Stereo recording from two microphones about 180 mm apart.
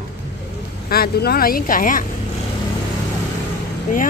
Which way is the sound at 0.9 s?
60° left (ahead or behind).